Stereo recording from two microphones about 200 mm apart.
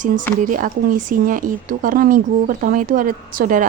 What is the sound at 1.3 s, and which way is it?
A woman's voice, 40° right (ahead or behind).